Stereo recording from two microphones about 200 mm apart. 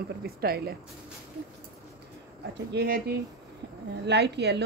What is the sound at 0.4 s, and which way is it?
Speech, 50° right (ahead or behind).